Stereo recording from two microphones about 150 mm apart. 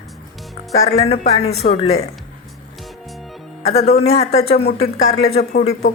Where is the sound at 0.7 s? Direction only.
45° left (ahead or behind).